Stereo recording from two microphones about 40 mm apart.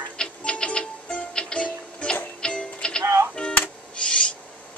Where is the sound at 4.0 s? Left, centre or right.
Left.